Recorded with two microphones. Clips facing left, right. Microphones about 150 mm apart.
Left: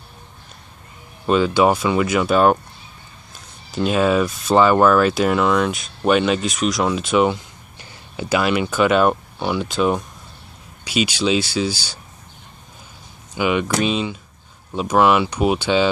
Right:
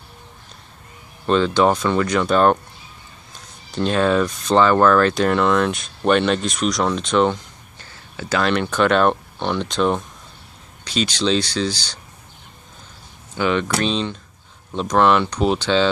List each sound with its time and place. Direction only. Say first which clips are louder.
1.2 s speech: left 1 dB; 10° left (ahead or behind)
3.7 s speech: left 1 dB; 5° left (ahead or behind)
13.3 s speech: left 1 dB; 10° left (ahead or behind)